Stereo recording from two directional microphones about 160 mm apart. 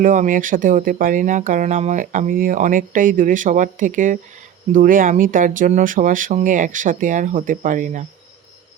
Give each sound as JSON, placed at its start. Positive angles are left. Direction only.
{"t": 0.0, "sound": "speech", "side_deg": -55}